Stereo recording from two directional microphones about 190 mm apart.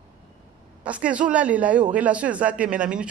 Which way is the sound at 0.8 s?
5° right (ahead or behind).